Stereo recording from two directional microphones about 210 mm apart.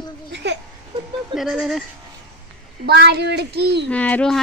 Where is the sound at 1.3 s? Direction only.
Centre (ahead or behind).